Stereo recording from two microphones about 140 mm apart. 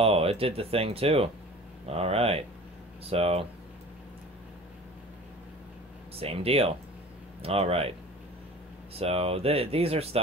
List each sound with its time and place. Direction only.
0.0 s speech: 45° right (ahead or behind)
6.1 s speech: 45° right (ahead or behind)
8.9 s speech: 45° right (ahead or behind)